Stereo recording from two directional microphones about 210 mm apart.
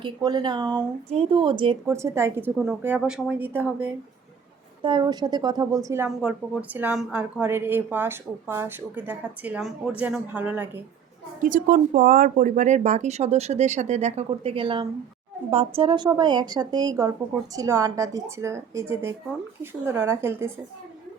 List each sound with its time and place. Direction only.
0.0 s a woman's voice: 20° right (ahead or behind)
4.8 s a woman's voice: 20° right (ahead or behind)
11.4 s a woman's voice: 40° right (ahead or behind); by 20.5 s 10° right (ahead or behind)